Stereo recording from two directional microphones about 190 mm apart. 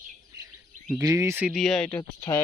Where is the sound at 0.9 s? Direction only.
15° right (ahead or behind).